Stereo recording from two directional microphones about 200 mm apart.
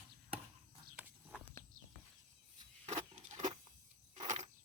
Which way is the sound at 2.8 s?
35° right (ahead or behind).